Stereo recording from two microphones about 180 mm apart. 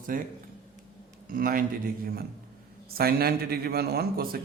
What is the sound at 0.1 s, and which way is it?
Speech, 50° right (ahead or behind).